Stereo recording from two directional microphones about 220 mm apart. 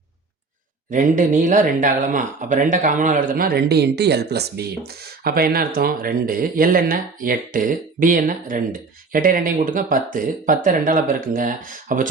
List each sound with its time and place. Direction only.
0.9 s speech: 35° right (ahead or behind)